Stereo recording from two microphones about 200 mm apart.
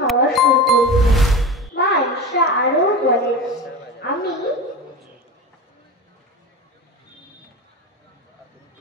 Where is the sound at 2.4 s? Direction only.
55° left (ahead or behind).